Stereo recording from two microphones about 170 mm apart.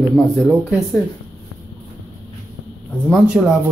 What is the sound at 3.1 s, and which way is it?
Speech, centre (ahead or behind).